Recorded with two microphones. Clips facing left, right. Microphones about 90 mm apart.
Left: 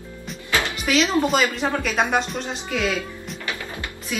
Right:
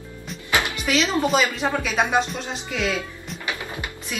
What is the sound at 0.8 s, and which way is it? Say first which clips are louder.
Speech: left 4 dB; centre (ahead or behind).